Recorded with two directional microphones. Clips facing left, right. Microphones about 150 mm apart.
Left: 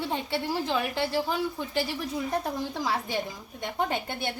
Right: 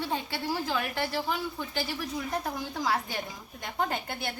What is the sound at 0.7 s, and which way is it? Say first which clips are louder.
Speech: left 3 dB; 25° left (ahead or behind).